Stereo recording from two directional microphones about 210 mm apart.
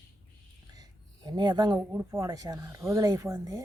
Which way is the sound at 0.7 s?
20° right (ahead or behind).